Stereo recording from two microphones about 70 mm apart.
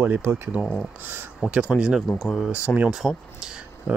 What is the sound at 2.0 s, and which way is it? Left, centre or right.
Speech, centre.